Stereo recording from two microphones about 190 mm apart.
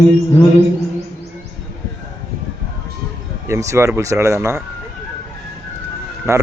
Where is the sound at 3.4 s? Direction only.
15° right (ahead or behind).